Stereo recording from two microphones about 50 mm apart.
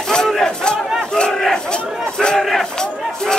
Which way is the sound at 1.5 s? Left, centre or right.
Centre.